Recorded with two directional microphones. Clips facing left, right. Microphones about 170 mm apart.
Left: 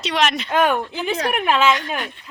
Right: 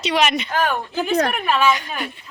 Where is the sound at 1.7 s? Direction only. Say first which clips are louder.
Left 2 dB; 5° right (ahead or behind).